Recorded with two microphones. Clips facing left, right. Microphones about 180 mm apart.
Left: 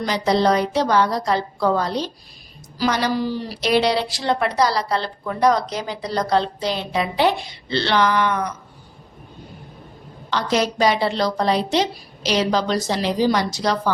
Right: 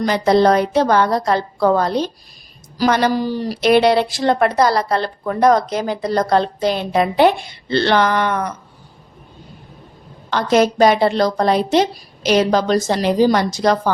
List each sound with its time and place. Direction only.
0.0 s a woman's voice: 55° right (ahead or behind)
10.2 s a woman's voice: 50° right (ahead or behind)